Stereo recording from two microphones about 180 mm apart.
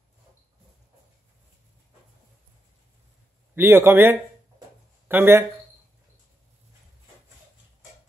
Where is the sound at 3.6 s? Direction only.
10° right (ahead or behind).